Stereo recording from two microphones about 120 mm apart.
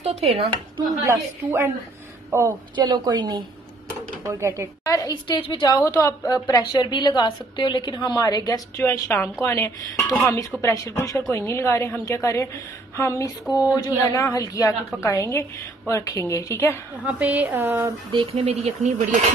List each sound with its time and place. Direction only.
0.0 s speech: 60° right (ahead or behind)
1.0 s a woman's voice: 25° right (ahead or behind)
2.7 s a woman's voice: 40° right (ahead or behind)
4.2 s a woman's voice: 25° right (ahead or behind)
4.8 s a woman's voice: 35° left (ahead or behind)
13.5 s a woman's voice: 10° right (ahead or behind)
14.1 s a woman's voice: 30° left (ahead or behind)
17.0 s a woman's voice: 15° right (ahead or behind)
18.1 s speech: 50° right (ahead or behind); by 19.2 s 80° right